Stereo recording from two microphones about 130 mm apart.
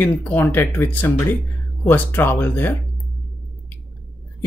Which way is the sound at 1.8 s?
15° left (ahead or behind).